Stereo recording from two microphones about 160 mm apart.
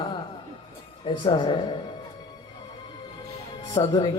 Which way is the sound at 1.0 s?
30° left (ahead or behind).